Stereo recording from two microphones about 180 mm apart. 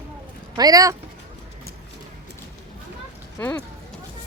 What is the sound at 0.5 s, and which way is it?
Speech, 20° right (ahead or behind).